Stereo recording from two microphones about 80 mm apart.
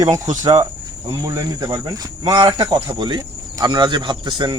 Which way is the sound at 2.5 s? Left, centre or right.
Right.